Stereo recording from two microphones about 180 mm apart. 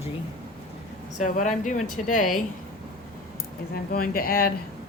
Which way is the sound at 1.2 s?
45° left (ahead or behind).